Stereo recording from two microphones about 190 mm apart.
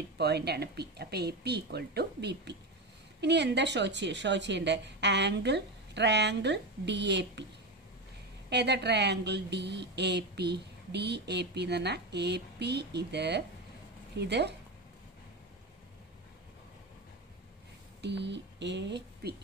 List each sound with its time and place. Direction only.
0.2 s a woman's voice: 60° right (ahead or behind)
8.5 s a woman's voice: 60° right (ahead or behind)
18.0 s speech: 65° right (ahead or behind)